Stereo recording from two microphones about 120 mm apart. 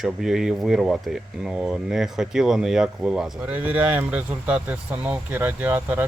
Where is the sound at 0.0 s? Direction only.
5° right (ahead or behind).